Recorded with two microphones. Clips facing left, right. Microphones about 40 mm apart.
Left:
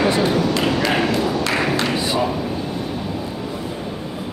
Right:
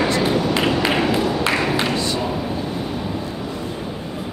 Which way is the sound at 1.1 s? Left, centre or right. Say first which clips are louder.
Even; centre.